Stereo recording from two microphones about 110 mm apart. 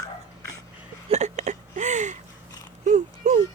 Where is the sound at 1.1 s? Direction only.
90° right.